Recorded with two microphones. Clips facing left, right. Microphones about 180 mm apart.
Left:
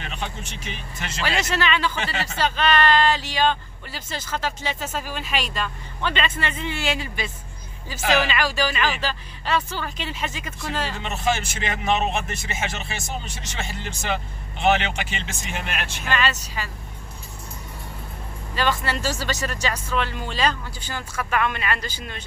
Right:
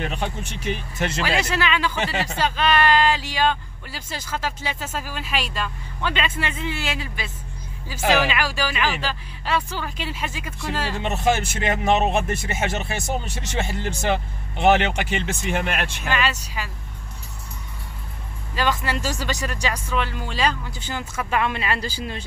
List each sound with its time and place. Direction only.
0.0 s speech: 55° right (ahead or behind)
1.2 s speech: 10° right (ahead or behind)
11.0 s speech: 55° right (ahead or behind)
16.1 s speech: 10° right (ahead or behind)
18.5 s speech: 10° right (ahead or behind)
20.8 s speech: 20° right (ahead or behind)